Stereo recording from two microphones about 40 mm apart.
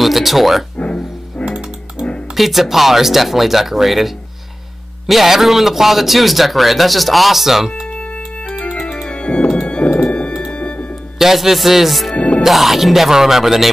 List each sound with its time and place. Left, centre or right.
0.0 s music: centre
1.4 s music: centre
2.3 s a man's voice: centre
9.1 s organ: left
10.5 s music: left
11.1 s a man's voice: centre
12.2 s music: left
12.4 s a man's voice: centre